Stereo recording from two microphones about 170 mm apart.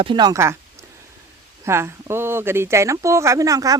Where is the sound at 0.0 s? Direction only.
25° right (ahead or behind).